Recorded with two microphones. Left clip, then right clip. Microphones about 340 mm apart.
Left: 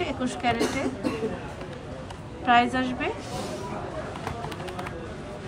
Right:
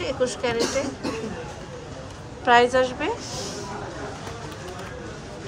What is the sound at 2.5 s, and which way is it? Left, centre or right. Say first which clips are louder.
Speech: right 4 dB; centre.